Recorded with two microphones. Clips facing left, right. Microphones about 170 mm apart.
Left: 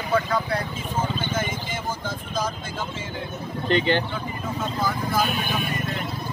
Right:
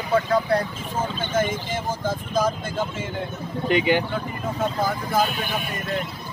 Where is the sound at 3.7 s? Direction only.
10° right (ahead or behind).